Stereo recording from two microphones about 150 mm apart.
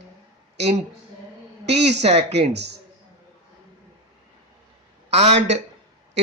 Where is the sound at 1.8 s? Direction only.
45° right (ahead or behind).